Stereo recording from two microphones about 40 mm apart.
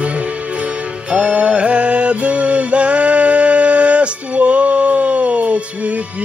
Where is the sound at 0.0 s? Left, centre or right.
Right.